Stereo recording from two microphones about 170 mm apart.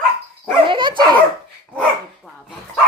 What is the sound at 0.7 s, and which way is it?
Speech, 30° right (ahead or behind).